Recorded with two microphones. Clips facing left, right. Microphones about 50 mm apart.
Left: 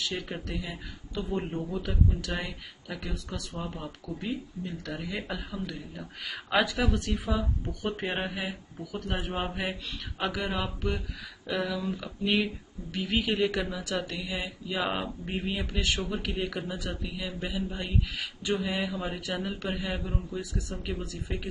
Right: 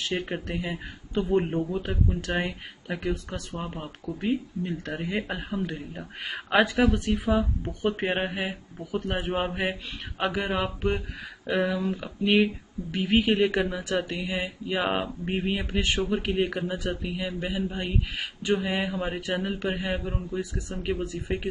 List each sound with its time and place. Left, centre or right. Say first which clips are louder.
0.0 s speech: right 4 dB; right
6.8 s speech: right 6 dB; right
20.3 s speech: right 3 dB; right